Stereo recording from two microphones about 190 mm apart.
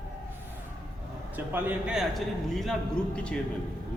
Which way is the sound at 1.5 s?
5° right (ahead or behind).